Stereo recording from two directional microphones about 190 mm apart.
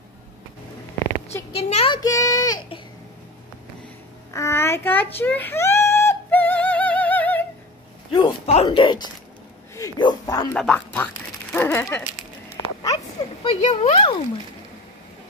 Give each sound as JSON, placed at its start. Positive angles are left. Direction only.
{"t": 1.5, "sound": "a child's voice", "side_deg": 35}
{"t": 2.0, "sound": "speech", "side_deg": 20}
{"t": 4.3, "sound": "a sound", "side_deg": 15}
{"t": 8.1, "sound": "speech", "side_deg": 25}
{"t": 10.5, "sound": "speech", "side_deg": 5}
{"t": 12.9, "sound": "a sound", "side_deg": 35}